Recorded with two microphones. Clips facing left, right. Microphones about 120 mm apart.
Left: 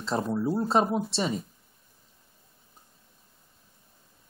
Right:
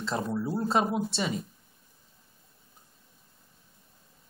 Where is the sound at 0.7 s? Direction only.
35° left (ahead or behind).